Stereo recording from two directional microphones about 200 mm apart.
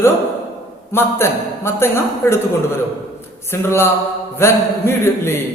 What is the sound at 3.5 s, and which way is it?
A man's voice, 10° left (ahead or behind).